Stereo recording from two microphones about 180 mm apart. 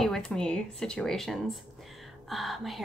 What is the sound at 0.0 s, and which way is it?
Speech, 5° left (ahead or behind).